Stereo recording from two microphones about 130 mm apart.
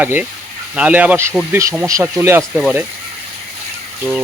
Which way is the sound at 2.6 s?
5° right (ahead or behind).